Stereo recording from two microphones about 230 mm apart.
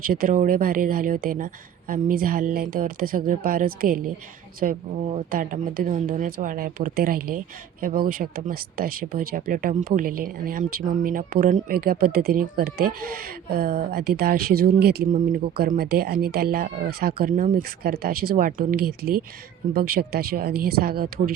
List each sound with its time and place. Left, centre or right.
0.0 s speech: right